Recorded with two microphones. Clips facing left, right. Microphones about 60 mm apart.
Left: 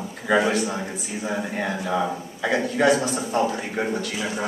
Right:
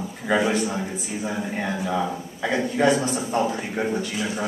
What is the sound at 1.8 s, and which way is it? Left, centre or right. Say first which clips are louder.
Speech: left 1 dB; centre.